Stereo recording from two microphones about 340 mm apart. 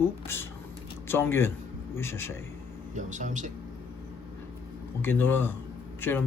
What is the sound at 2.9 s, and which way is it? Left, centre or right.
Speech, right.